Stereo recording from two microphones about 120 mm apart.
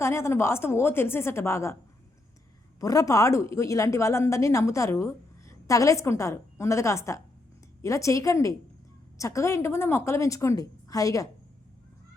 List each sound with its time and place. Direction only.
0.0 s a woman's voice: 20° left (ahead or behind)
2.8 s a woman's voice: 30° left (ahead or behind)